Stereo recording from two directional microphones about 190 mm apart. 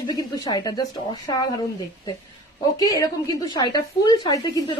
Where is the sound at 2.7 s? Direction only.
20° left (ahead or behind).